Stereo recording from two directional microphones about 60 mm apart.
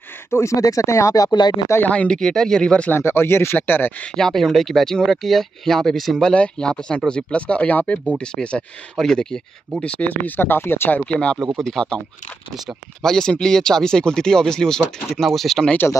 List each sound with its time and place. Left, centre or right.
0.3 s speech: left
0.6 s speech: left
1.9 s speech: centre
2.1 s speech: centre
3.0 s speech: left
4.2 s speech: centre
6.2 s speech: centre
9.8 s speech: left
11.1 s speech: centre
13.0 s speech: centre
15.8 s speech: left